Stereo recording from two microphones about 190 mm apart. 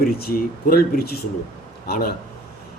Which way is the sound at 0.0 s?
50° left (ahead or behind).